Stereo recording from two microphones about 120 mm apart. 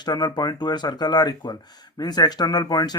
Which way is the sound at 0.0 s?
35° left (ahead or behind).